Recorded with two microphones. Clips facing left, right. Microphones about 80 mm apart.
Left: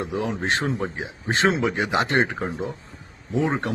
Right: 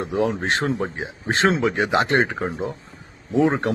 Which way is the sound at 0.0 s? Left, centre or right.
Right.